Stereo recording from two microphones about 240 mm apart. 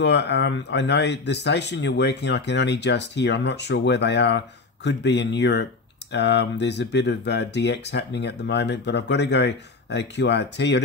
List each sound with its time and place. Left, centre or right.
0.0 s speech: left